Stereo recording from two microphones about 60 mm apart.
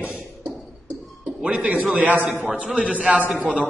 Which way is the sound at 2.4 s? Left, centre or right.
Centre.